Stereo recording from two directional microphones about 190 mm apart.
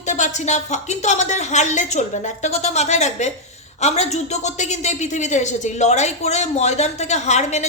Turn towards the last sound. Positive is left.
turn(degrees=35)  # may be behind; listen again after turning